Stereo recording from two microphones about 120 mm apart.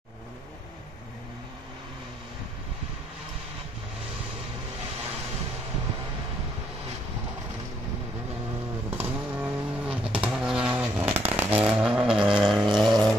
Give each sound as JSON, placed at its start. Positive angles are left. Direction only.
{"t": 8.9, "sound": "vehicle", "side_deg": -10}
{"t": 12.6, "sound": "music", "side_deg": 0}